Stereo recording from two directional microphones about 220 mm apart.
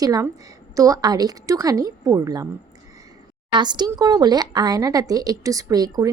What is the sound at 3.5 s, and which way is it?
Speech, 20° right (ahead or behind).